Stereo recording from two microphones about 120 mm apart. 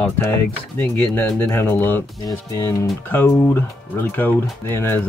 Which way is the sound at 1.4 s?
20° left (ahead or behind).